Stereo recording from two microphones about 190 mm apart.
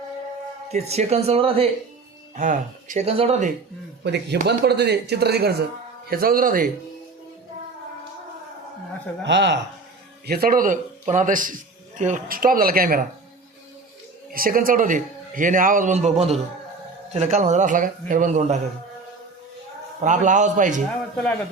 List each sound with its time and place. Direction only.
0.7 s a man's voice: 35° right (ahead or behind)
4.0 s speech: 60° right (ahead or behind); by 6.7 s 45° right (ahead or behind)
9.2 s speech: 70° right (ahead or behind)
10.2 s speech: 55° right (ahead or behind)
14.3 s speech: 50° right (ahead or behind)
17.2 s a man's voice: 35° right (ahead or behind)
20.0 s a man's voice: 40° right (ahead or behind)